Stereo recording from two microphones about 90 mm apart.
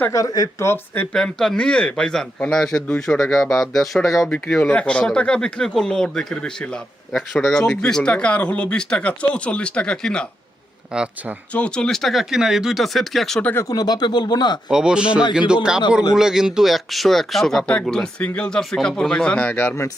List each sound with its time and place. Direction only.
0.1 s speech: 40° left (ahead or behind)
1.1 s speech: 5° left (ahead or behind)
4.3 s speech: 10° left (ahead or behind)
10.9 s speech: 10° right (ahead or behind)
11.5 s speech: 10° left (ahead or behind)
13.4 s speech: 25° left (ahead or behind)
13.7 s speech: 45° left (ahead or behind)
14.7 s speech: 10° right (ahead or behind); by 19.7 s 20° left (ahead or behind)